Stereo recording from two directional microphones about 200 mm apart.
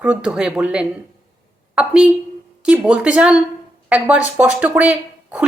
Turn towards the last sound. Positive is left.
turn(degrees=-5)  # may be behind; listen again after turning